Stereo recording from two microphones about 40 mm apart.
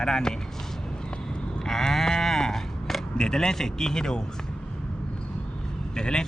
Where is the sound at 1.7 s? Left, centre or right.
Centre.